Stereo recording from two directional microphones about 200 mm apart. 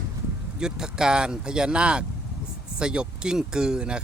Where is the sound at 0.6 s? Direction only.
5° right (ahead or behind).